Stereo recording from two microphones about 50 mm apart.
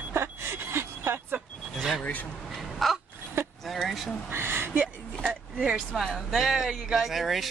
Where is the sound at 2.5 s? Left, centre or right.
Centre.